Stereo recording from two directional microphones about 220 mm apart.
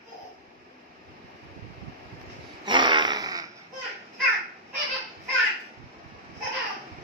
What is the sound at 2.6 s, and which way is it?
Fart, 20° right (ahead or behind).